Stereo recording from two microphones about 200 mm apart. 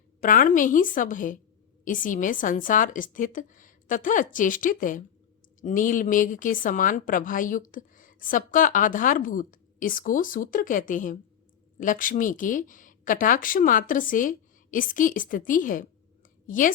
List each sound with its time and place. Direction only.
0.2 s a woman's voice: 45° left (ahead or behind)